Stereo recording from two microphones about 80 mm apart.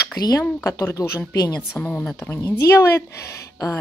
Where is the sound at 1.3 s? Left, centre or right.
Left.